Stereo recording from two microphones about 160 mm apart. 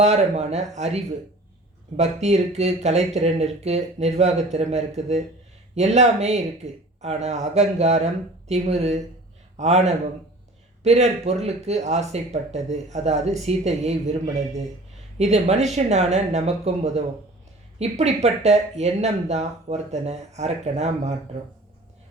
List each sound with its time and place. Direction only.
0.0 s speech: 45° right (ahead or behind)